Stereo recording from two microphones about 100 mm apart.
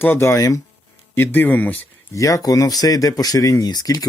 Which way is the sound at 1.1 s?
20° left (ahead or behind).